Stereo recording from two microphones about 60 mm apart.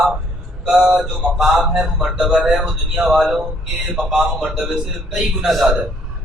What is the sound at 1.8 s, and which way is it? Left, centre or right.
A man's voice, centre.